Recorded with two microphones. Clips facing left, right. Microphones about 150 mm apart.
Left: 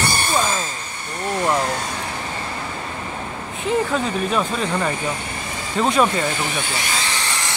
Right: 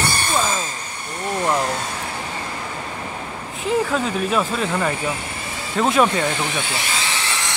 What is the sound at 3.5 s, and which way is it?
Speech, centre (ahead or behind).